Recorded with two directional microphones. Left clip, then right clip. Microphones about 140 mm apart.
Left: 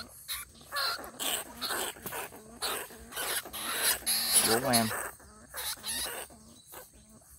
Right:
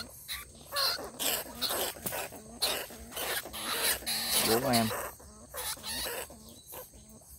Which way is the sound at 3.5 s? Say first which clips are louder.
Left 1 dB; 35° left (ahead or behind).